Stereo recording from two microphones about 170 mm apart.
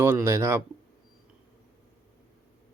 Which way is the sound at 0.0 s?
15° right (ahead or behind).